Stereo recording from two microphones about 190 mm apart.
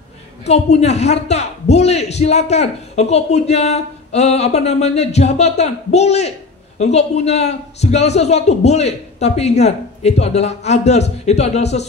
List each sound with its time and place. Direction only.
0.5 s a man's voice: 35° left (ahead or behind)